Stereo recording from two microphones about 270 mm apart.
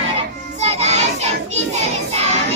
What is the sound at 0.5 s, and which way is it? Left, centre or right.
Music, right.